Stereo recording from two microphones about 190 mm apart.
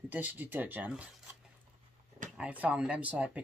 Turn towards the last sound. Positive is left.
turn(degrees=-5)  # may be behind; listen again after turning